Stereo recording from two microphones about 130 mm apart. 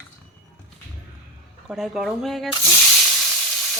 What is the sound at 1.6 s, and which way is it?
Speech, centre (ahead or behind).